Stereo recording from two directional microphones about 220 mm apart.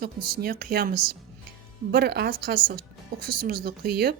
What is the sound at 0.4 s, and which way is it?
A woman's voice, 45° right (ahead or behind).